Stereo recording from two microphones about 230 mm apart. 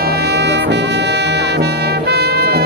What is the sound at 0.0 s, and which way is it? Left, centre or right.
Brass instrument, right.